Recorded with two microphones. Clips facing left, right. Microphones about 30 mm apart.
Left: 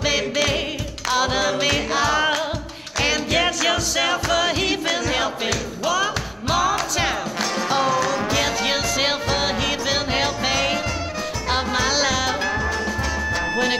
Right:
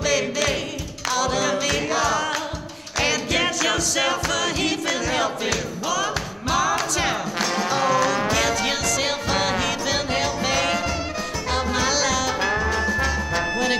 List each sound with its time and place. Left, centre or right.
0.2 s music: centre
1.1 s music: left
3.0 s music: centre
5.9 s speech: centre
6.5 s music: centre
7.6 s music: centre
8.5 s music: centre
9.3 s music: centre
12.4 s music: centre